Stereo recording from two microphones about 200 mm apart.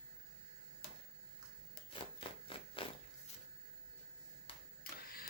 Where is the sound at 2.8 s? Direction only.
25° left (ahead or behind).